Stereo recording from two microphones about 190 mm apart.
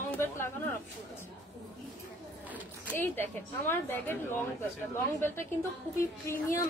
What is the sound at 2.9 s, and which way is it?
A woman's voice, 10° left (ahead or behind).